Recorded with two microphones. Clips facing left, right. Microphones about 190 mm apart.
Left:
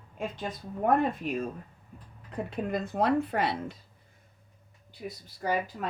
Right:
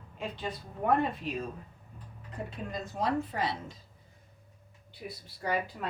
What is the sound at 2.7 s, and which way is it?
A woman's voice, 60° left (ahead or behind).